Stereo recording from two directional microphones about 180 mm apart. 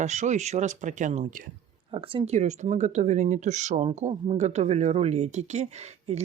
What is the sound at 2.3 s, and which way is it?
Speech, 40° right (ahead or behind).